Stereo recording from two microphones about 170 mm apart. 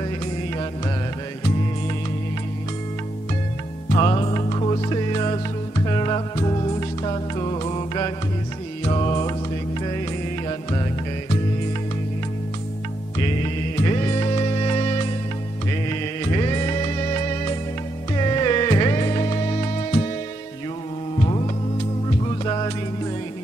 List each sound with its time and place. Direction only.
3.9 s music: 30° left (ahead or behind)
13.8 s music: 25° left (ahead or behind)
16.3 s music: 25° left (ahead or behind)
18.1 s music: 25° left (ahead or behind)
21.2 s music: 30° left (ahead or behind)